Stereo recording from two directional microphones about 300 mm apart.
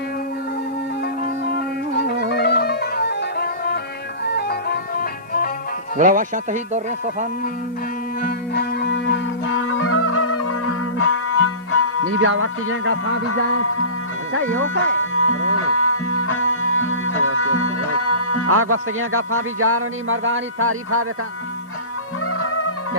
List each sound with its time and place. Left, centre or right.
1.0 s music: left
6.0 s speech: right
8.2 s music: left
12.1 s speech: right
13.2 s music: left
15.1 s music: left
18.4 s speech: right
22.3 s music: left